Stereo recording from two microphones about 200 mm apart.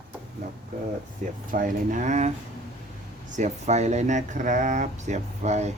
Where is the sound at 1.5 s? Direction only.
40° right (ahead or behind).